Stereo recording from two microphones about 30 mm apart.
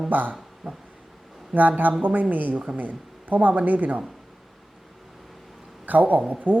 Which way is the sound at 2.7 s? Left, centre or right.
Right.